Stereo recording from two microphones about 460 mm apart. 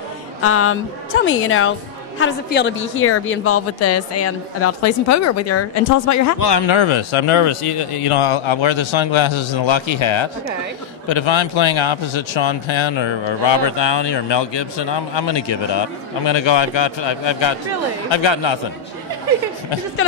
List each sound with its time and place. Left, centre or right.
0.4 s a woman's voice: left
6.4 s speech: left